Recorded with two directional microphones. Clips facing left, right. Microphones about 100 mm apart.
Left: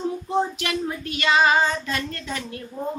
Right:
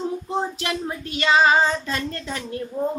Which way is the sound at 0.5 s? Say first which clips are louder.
Even; 30° right (ahead or behind).